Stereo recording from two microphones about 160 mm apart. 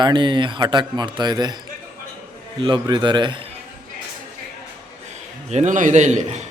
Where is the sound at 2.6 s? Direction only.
30° right (ahead or behind).